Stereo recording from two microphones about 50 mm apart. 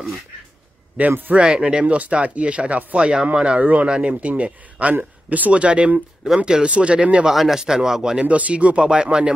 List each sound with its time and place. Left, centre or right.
1.0 s speech: right
1.3 s speech: centre
7.2 s speech: centre
8.3 s speech: right